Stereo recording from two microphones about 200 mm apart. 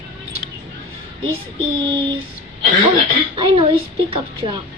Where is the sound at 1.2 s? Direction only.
25° right (ahead or behind).